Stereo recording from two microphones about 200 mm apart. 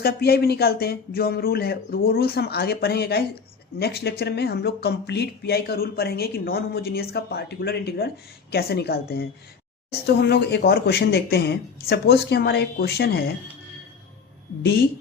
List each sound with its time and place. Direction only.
0.0 s speech: 50° left (ahead or behind)